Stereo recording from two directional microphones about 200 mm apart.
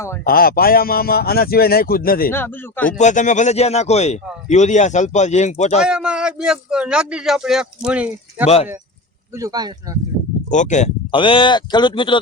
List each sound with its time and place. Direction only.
0.3 s a man's voice: 50° left (ahead or behind)
2.3 s speech: 10° left (ahead or behind)
3.0 s a man's voice: 35° left (ahead or behind)
5.8 s speech: 5° right (ahead or behind)
9.3 s speech: 20° right (ahead or behind)
10.5 s a man's voice: 35° left (ahead or behind)
11.1 s speech: 25° left (ahead or behind)